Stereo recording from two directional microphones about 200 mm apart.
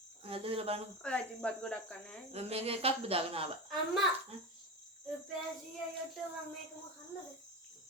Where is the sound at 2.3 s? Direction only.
30° right (ahead or behind).